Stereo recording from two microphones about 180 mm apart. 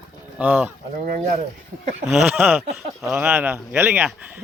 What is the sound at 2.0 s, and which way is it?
Speech, 5° right (ahead or behind).